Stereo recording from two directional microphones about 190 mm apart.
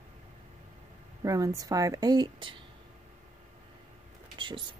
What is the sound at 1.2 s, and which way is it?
A woman's voice, 15° right (ahead or behind).